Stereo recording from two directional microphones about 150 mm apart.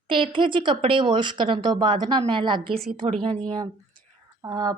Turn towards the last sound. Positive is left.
turn(degrees=-25)  # may be behind; listen again after turning